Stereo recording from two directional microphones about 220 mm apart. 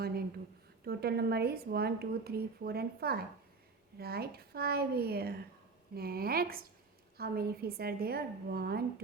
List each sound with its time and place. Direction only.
0.9 s a woman's voice: 45° right (ahead or behind)